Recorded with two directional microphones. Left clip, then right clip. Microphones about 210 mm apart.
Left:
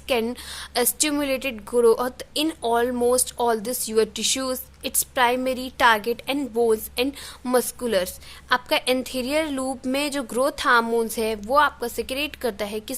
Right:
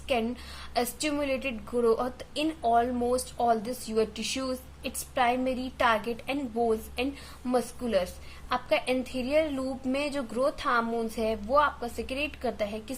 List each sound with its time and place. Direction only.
0.1 s a woman's voice: 40° left (ahead or behind)